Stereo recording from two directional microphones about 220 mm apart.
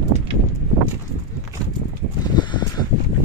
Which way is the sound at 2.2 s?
20° left (ahead or behind).